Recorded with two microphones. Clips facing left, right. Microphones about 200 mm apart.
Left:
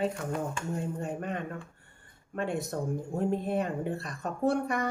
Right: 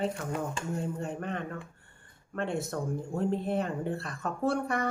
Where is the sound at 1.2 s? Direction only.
15° left (ahead or behind).